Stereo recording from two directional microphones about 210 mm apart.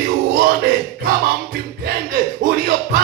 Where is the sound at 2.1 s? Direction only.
40° right (ahead or behind).